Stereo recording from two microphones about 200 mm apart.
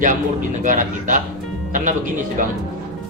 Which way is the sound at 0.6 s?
40° right (ahead or behind).